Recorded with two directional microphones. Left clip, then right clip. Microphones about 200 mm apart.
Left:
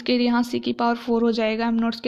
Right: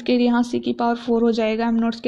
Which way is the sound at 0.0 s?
15° left (ahead or behind).